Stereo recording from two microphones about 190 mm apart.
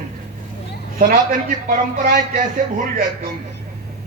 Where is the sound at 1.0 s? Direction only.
45° right (ahead or behind).